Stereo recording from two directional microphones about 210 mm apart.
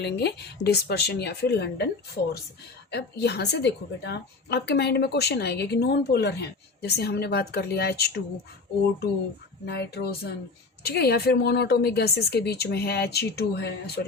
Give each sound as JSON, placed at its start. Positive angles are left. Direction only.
{"t": 0.0, "sound": "a woman's voice", "side_deg": 50}
{"t": 2.9, "sound": "a woman's voice", "side_deg": 50}
{"t": 9.6, "sound": "a woman's voice", "side_deg": 50}